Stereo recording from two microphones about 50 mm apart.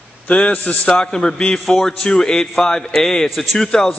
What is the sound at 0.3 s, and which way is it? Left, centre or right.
A man's voice, left.